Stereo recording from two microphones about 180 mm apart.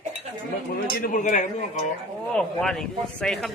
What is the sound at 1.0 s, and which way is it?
Speech, 45° left (ahead or behind).